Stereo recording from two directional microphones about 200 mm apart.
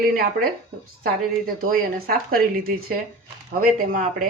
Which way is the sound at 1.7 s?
45° right (ahead or behind).